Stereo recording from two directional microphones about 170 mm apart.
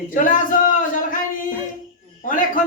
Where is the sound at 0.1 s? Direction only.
50° left (ahead or behind).